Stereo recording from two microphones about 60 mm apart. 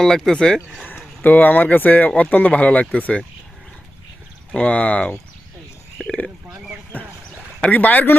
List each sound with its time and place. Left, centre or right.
0.0 s speech: centre
0.9 s speech: left
4.5 s speech: left
6.9 s speech: left